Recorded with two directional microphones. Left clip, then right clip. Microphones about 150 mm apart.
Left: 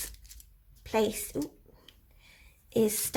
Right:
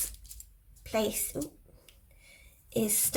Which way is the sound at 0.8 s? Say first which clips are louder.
Left 2 dB; 40° left (ahead or behind).